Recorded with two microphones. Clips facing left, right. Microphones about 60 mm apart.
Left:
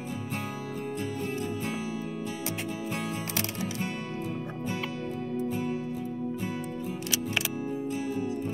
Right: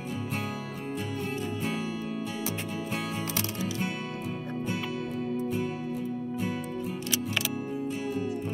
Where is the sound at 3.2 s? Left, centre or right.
Left.